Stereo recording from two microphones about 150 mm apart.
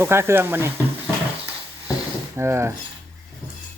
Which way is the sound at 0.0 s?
15° right (ahead or behind).